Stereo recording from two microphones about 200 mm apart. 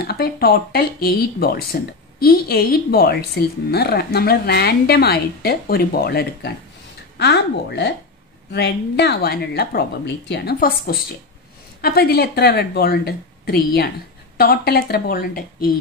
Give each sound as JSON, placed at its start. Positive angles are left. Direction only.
{"t": 0.0, "sound": "speech", "side_deg": 50}